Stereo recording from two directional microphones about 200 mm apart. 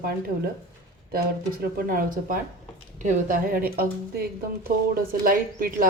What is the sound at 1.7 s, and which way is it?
Speech, 45° right (ahead or behind).